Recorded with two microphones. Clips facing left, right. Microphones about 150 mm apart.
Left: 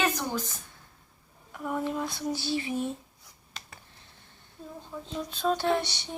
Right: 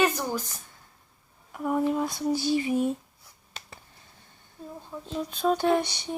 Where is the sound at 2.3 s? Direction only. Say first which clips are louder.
Right 8 dB; 45° right (ahead or behind).